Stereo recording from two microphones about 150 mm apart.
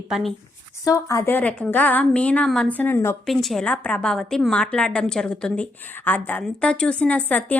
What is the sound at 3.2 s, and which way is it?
A woman's voice, centre (ahead or behind).